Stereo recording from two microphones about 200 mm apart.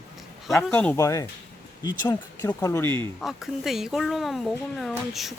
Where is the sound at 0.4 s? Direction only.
5° left (ahead or behind).